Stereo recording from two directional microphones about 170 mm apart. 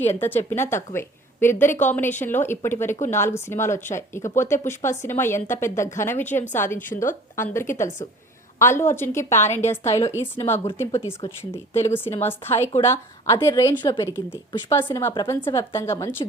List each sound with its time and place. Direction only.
0.0 s speech: 10° left (ahead or behind)
6.9 s a woman's voice: 50° left (ahead or behind)
7.3 s a woman's voice: 15° left (ahead or behind)